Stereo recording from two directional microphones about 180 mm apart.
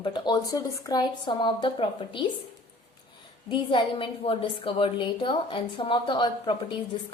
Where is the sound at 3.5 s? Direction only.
30° left (ahead or behind).